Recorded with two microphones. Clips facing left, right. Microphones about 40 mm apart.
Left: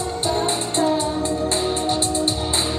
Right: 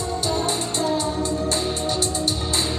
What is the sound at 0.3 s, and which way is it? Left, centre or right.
Music, left.